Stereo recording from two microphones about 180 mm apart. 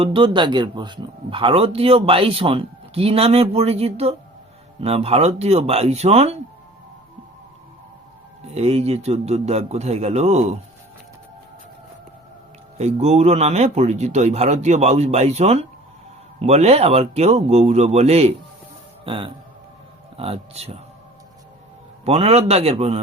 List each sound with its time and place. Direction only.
0.0 s a man's voice: 30° right (ahead or behind)
8.5 s a man's voice: 35° right (ahead or behind)
12.7 s a man's voice: 35° right (ahead or behind)
22.0 s a man's voice: 35° right (ahead or behind)